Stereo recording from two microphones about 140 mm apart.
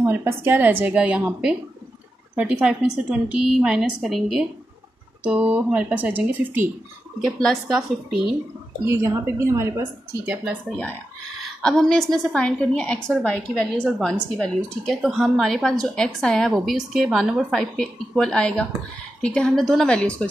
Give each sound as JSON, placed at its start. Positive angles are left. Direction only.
{"t": 0.0, "sound": "a woman's voice", "side_deg": -15}
{"t": 7.2, "sound": "a woman's voice", "side_deg": 0}
{"t": 8.8, "sound": "a woman's voice", "side_deg": -20}
{"t": 11.6, "sound": "a woman's voice", "side_deg": 5}